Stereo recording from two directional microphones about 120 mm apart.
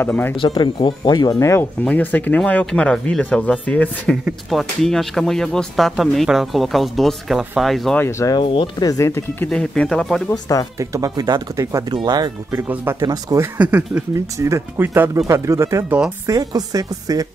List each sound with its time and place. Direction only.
0.0 s speech: 15° left (ahead or behind)
0.4 s speech: 40° left (ahead or behind)
1.4 s speech: 25° left (ahead or behind)
1.8 s speech: 15° left (ahead or behind)
4.5 s speech: centre (ahead or behind)
7.9 s speech: 20° left (ahead or behind)
8.4 s speech: 35° left (ahead or behind)
9.5 s speech: 5° left (ahead or behind)
10.3 s speech: 30° left (ahead or behind)
10.8 s speech: 30° right (ahead or behind)
11.9 s a woman's voice: 35° right (ahead or behind)
13.6 s speech: 10° right (ahead or behind)
14.1 s a woman's voice: 25° right (ahead or behind)